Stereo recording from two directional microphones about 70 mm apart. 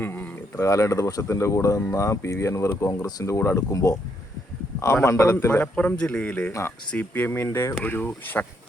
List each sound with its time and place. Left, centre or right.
0.0 s a sound: left
0.6 s speech: left
5.0 s speech: left
5.7 s speech: centre
7.0 s speech: left
7.9 s speech: left